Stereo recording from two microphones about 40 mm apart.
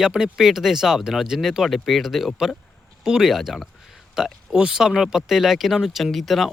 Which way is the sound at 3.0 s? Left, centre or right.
Centre.